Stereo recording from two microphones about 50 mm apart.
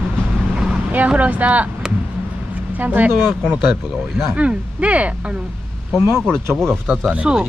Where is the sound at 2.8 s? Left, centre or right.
Right.